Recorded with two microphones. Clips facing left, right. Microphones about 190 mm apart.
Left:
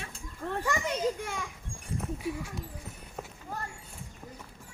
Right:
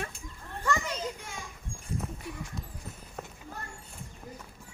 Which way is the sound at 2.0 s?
5° left (ahead or behind).